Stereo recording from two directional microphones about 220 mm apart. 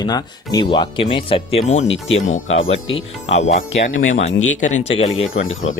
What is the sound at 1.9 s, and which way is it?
Speech, 60° left (ahead or behind).